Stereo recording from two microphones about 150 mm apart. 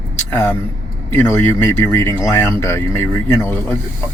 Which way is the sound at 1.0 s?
15° left (ahead or behind).